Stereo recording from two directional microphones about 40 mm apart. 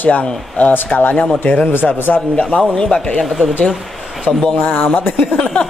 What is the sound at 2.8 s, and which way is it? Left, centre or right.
Speech, left.